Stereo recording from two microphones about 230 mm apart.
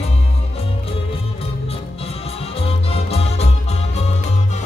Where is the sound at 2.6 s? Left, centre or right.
Left.